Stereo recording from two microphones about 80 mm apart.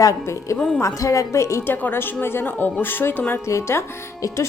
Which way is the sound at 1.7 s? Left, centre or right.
Left.